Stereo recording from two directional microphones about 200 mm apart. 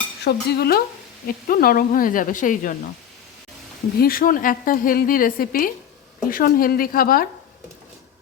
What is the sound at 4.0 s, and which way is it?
Speech, 45° left (ahead or behind).